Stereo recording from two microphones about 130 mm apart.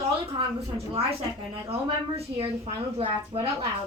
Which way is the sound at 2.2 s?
45° right (ahead or behind).